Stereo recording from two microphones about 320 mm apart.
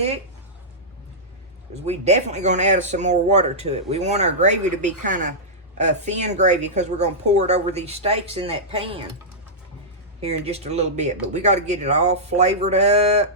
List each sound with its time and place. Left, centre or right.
1.8 s speech: right
10.2 s speech: centre